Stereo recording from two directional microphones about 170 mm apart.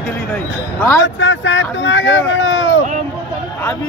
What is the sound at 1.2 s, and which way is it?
Speech, 90° left.